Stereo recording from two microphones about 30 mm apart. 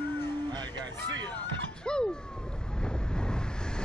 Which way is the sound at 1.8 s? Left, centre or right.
Left.